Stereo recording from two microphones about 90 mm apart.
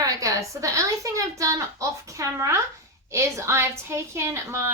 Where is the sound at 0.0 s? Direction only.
40° right (ahead or behind).